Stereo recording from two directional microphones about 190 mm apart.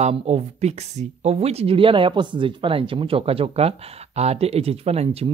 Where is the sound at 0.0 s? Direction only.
35° right (ahead or behind).